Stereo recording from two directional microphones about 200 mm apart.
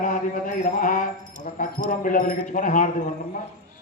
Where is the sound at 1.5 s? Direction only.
40° left (ahead or behind).